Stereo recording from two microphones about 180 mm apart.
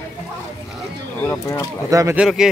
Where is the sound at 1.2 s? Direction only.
15° left (ahead or behind).